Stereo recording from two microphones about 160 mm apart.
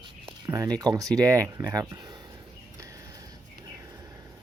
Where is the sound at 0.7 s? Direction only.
20° right (ahead or behind).